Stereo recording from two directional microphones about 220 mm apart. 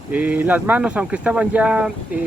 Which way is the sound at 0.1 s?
5° right (ahead or behind).